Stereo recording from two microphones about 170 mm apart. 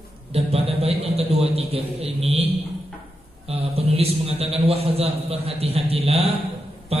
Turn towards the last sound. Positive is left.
turn(degrees=-35)  # may be behind; listen again after turning